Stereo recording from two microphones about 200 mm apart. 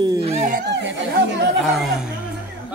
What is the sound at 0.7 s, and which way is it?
Chatter, 60° right (ahead or behind).